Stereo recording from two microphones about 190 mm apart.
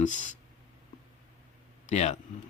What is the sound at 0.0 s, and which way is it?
Speech, 40° left (ahead or behind).